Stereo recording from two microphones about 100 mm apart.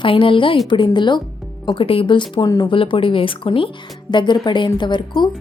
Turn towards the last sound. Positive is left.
turn(degrees=50)  # may be behind; listen again after turning